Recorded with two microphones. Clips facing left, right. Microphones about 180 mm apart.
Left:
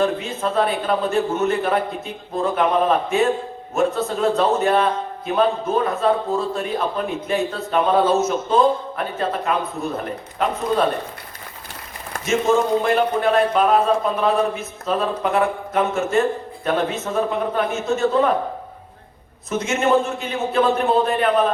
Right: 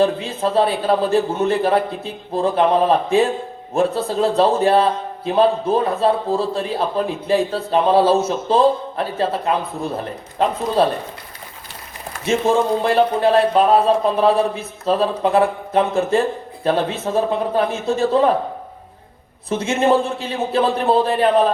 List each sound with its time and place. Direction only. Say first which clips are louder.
0.0 s a man's voice: right 3 dB; 30° right (ahead or behind)
12.5 s a man's voice: left 1 dB; 30° right (ahead or behind)
19.5 s a man's voice: right 2 dB; 30° right (ahead or behind)